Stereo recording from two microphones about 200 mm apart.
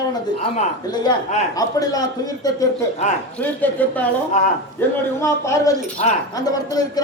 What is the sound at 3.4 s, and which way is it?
Speech, 10° left (ahead or behind).